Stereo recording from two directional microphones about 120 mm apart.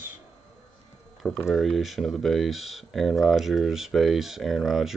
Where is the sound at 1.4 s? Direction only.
Centre (ahead or behind).